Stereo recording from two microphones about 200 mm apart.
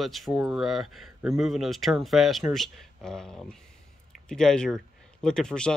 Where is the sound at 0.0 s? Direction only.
Centre (ahead or behind).